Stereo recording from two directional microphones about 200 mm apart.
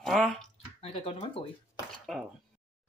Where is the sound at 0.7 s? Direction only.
30° left (ahead or behind).